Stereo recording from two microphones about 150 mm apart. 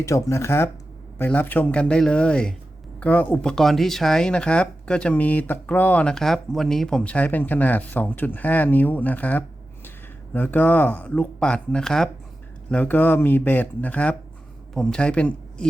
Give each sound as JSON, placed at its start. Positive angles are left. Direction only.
{"t": 0.0, "sound": "speech", "side_deg": 20}